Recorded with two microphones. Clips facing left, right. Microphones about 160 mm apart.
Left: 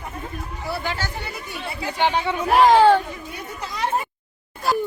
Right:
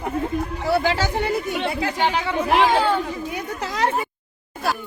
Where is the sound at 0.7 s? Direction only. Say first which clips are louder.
Right 8 dB; 90° right.